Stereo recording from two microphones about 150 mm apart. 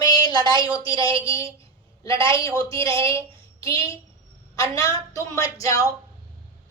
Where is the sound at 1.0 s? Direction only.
40° right (ahead or behind).